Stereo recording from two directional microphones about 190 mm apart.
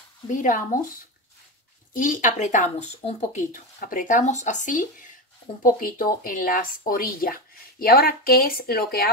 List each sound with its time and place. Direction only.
0.3 s speech: 45° left (ahead or behind)
2.0 s speech: 45° left (ahead or behind)